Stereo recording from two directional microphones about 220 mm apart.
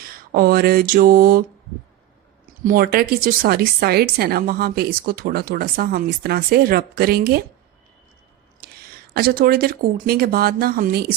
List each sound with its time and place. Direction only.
0.3 s a sound: 45° right (ahead or behind)
2.6 s speech: 40° right (ahead or behind)
9.1 s speech: 45° right (ahead or behind)